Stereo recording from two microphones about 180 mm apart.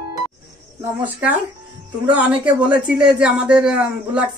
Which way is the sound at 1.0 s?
10° right (ahead or behind).